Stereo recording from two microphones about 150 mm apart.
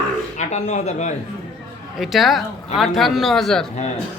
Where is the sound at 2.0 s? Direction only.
Centre (ahead or behind).